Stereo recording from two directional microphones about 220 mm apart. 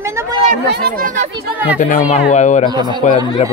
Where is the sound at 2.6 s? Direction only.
20° right (ahead or behind).